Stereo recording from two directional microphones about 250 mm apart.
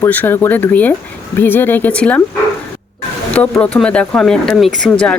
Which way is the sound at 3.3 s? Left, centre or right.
Centre.